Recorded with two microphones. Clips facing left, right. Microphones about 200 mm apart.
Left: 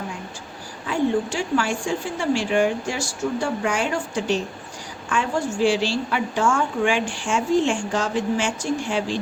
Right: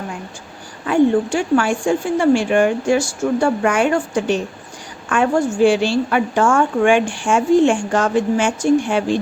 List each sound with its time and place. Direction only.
0.9 s a woman's voice: 55° right (ahead or behind)